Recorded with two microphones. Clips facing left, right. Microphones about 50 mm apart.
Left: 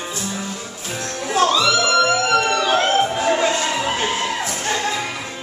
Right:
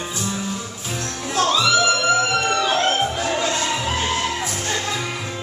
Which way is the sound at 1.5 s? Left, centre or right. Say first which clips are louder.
Left 1 dB; centre.